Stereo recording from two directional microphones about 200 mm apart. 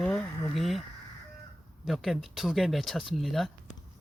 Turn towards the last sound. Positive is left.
turn(degrees=0)  # may be behind; listen again after turning